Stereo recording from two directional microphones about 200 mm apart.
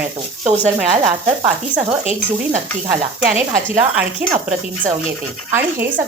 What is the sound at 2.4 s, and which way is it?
A woman's voice, 10° right (ahead or behind).